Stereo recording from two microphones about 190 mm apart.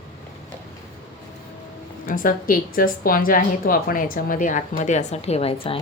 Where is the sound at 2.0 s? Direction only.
45° left (ahead or behind).